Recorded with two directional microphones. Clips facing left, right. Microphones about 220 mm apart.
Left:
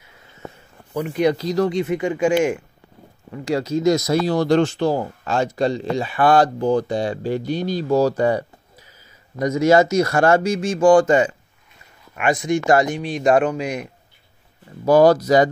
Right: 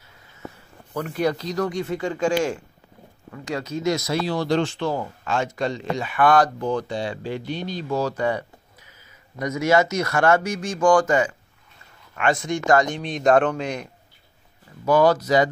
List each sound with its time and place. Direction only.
0.9 s speech: 10° left (ahead or behind)
1.3 s speech: 30° left (ahead or behind); by 2.6 s 15° left (ahead or behind)
3.4 s speech: 35° left (ahead or behind)
12.9 s speech: 5° left (ahead or behind)
14.9 s speech: 40° left (ahead or behind)